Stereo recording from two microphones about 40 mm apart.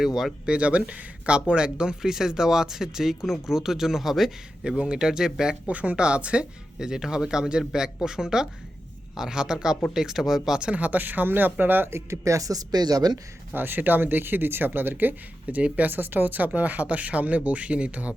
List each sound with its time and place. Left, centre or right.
0.0 s speech: centre
0.4 s speech: right
2.0 s speech: centre
4.8 s speech: centre
5.6 s speech: right; by 10.6 s centre
10.6 s speech: right
13.5 s speech: right
15.4 s speech: right
15.9 s speech: right